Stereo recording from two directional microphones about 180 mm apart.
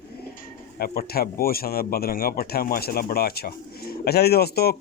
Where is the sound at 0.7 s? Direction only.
60° left (ahead or behind).